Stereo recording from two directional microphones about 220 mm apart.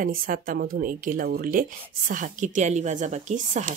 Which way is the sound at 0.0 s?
40° right (ahead or behind).